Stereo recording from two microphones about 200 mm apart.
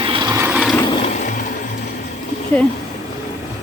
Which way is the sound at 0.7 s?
25° left (ahead or behind).